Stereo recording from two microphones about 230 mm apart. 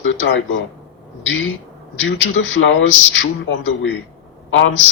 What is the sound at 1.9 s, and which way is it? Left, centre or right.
Speech, left.